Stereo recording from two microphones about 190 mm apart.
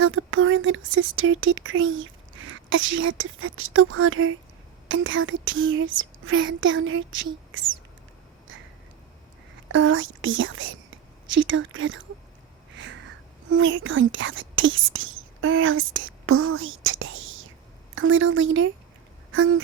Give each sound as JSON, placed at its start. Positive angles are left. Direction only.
{"t": 0.0, "sound": "speech", "side_deg": -90}
{"t": 9.7, "sound": "speech", "side_deg": -85}
{"t": 12.7, "sound": "speech", "side_deg": -70}